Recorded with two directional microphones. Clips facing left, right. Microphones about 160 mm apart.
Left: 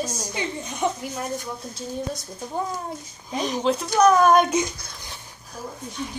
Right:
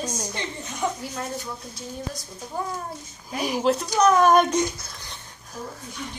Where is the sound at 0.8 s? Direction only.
25° left (ahead or behind).